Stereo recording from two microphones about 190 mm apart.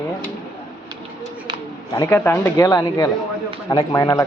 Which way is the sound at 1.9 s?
20° left (ahead or behind).